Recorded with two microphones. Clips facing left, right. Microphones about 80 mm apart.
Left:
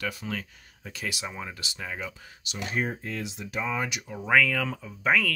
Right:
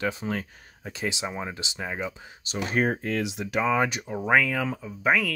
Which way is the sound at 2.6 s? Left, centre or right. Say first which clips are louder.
Right 5 dB; right.